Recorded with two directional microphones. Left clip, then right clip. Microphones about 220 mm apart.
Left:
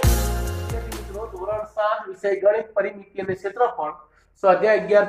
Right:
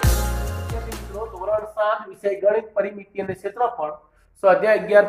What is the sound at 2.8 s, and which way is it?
Speech, 25° right (ahead or behind).